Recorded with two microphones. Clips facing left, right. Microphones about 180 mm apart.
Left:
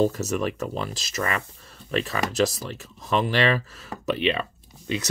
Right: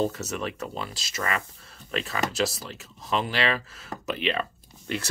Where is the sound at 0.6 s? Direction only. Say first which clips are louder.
Left 5 dB; 40° left (ahead or behind).